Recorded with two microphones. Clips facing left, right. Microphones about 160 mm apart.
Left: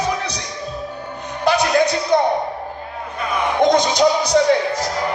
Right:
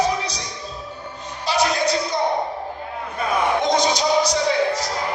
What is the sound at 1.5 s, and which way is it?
Music, 60° left (ahead or behind).